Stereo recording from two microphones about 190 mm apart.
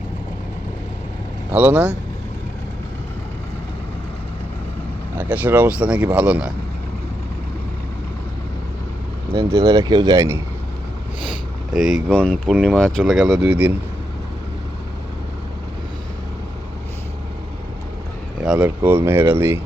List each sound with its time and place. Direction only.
1.5 s speech: 5° right (ahead or behind)
5.1 s speech: 10° right (ahead or behind)
9.3 s speech: 60° right (ahead or behind)
9.6 s speech: 20° right (ahead or behind)
11.7 s speech: centre (ahead or behind)
18.4 s speech: 5° right (ahead or behind)